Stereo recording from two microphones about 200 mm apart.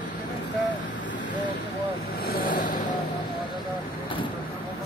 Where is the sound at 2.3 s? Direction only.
45° left (ahead or behind).